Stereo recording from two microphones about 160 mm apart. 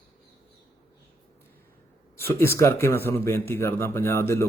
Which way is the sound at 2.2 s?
15° left (ahead or behind).